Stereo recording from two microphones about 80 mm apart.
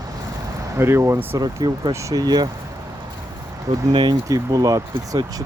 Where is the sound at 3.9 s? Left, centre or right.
Right.